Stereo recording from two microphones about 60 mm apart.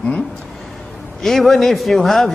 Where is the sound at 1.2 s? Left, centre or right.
Centre.